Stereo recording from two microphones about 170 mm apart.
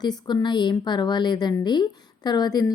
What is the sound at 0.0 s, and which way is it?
A woman's voice, 25° left (ahead or behind).